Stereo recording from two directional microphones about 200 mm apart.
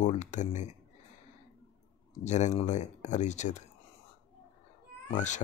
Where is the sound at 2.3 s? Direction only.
35° left (ahead or behind).